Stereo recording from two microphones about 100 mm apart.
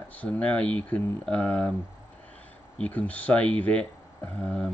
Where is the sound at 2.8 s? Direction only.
15° left (ahead or behind).